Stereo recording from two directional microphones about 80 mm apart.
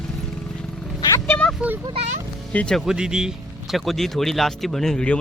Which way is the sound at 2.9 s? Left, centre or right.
Centre.